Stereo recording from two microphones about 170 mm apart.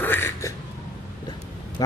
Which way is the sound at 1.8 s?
20° left (ahead or behind).